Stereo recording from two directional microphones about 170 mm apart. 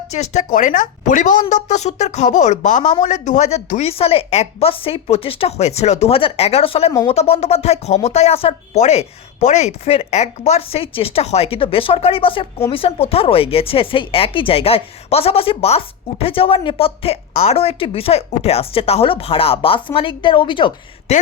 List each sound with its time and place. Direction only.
0.1 s speech: 40° left (ahead or behind)
21.1 s speech: 40° left (ahead or behind)